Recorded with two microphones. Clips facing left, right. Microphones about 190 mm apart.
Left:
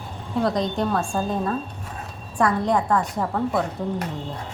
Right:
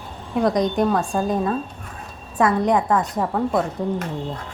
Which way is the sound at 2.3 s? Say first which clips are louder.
Right 3 dB; 20° right (ahead or behind).